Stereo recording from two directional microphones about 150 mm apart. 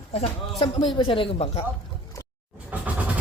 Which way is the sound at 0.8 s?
30° left (ahead or behind).